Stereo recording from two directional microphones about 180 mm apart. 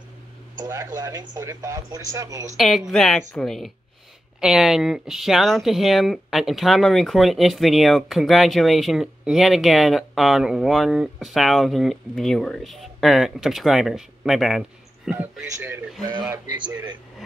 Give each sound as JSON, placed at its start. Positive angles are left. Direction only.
{"t": 0.6, "sound": "speech", "side_deg": -20}
{"t": 2.5, "sound": "a man's voice", "side_deg": 0}